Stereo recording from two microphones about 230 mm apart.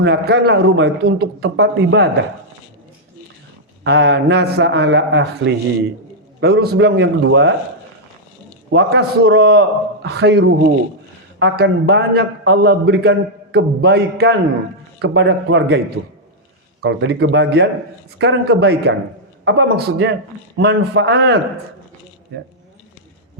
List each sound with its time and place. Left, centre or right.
0.0 s a man's voice: right
3.8 s a man's voice: right
8.7 s a man's voice: right
16.8 s a man's voice: right